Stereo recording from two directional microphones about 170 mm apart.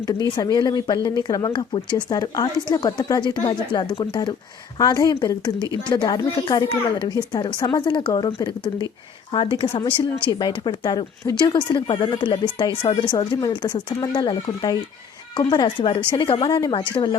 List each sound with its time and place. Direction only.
0.1 s a woman's voice: 25° left (ahead or behind)